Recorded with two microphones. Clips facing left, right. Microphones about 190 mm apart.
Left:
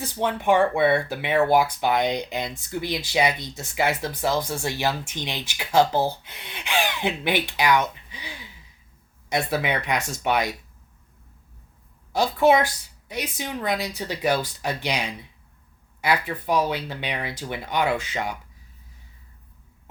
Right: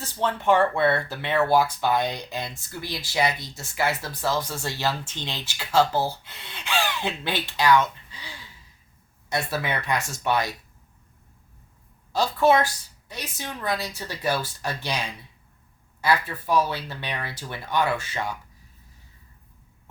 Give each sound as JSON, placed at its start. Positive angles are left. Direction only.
{"t": 0.0, "sound": "speech", "side_deg": 15}
{"t": 12.1, "sound": "speech", "side_deg": 15}